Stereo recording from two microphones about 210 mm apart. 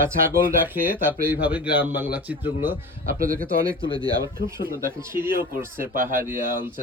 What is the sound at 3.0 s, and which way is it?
Speech, 40° right (ahead or behind).